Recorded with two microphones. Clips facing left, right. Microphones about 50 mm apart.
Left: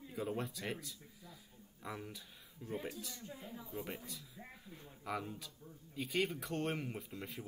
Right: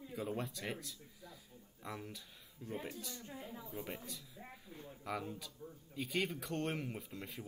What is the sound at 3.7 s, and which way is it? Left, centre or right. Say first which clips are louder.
A woman's voice: left 2 dB; centre.